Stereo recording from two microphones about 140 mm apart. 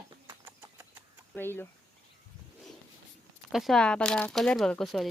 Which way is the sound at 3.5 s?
Centre (ahead or behind).